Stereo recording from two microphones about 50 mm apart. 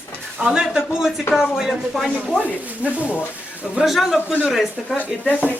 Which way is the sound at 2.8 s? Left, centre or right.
Right.